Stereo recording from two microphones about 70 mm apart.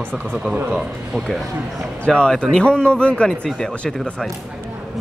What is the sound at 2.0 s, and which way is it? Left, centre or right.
Speech, centre.